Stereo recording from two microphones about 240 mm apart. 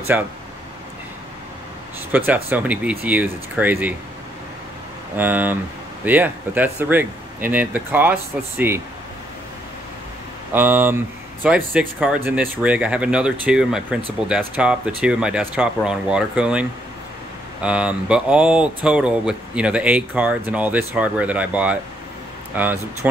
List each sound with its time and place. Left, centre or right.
0.1 s speech: centre
2.1 s speech: centre
5.1 s speech: centre
10.5 s speech: centre